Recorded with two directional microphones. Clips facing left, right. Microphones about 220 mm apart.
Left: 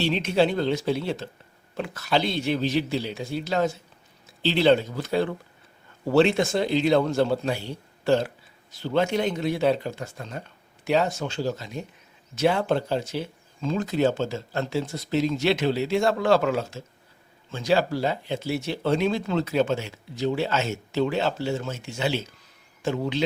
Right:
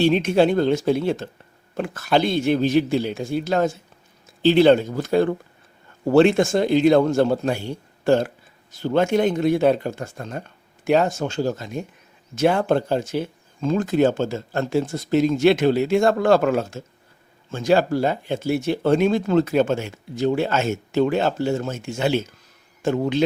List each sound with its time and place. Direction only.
0.0 s speech: 50° right (ahead or behind)